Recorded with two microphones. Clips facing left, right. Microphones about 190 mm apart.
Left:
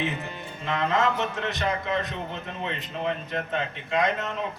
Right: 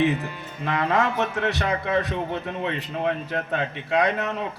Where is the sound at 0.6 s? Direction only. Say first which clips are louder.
Right 2 dB; 65° right (ahead or behind).